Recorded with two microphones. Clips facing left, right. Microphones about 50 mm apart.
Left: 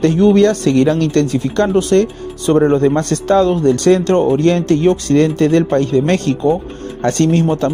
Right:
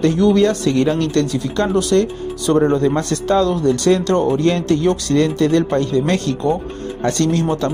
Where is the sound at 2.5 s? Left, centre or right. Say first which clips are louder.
Left 3 dB; left.